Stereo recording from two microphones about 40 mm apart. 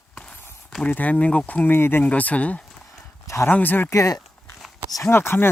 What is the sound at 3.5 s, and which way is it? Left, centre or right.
Speech, left.